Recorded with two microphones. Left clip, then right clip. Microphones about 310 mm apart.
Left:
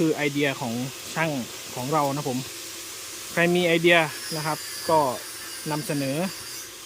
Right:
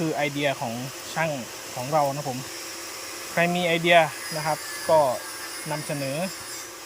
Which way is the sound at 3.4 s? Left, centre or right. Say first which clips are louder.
Left 2 dB; centre.